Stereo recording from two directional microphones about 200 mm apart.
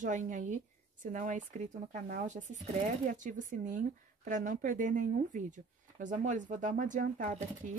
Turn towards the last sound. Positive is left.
turn(degrees=-40)  # may be behind; listen again after turning